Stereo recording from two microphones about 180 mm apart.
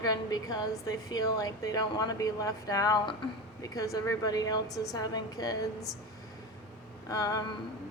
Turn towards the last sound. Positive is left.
turn(degrees=20)  # may be behind; listen again after turning